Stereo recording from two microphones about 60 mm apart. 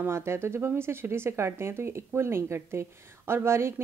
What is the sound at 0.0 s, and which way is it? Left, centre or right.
Speech, right.